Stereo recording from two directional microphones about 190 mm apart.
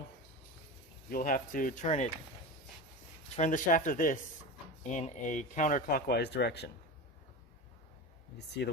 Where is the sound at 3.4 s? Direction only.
40° left (ahead or behind); by 6.7 s 60° left (ahead or behind).